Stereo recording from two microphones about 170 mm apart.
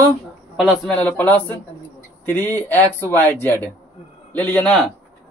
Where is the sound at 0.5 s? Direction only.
Centre (ahead or behind).